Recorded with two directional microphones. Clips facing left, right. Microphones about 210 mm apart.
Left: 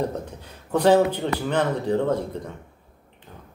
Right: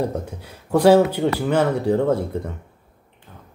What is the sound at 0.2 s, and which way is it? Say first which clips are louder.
Speech: right 2 dB; 10° right (ahead or behind).